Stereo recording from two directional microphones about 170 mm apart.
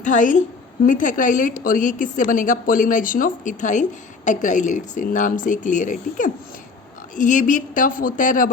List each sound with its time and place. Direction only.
0.0 s a woman's voice: 50° left (ahead or behind)